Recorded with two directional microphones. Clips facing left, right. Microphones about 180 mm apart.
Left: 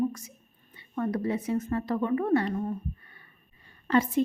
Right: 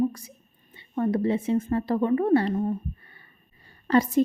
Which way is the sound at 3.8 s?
40° right (ahead or behind).